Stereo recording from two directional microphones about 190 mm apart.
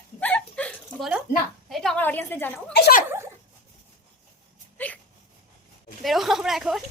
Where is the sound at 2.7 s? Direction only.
50° left (ahead or behind).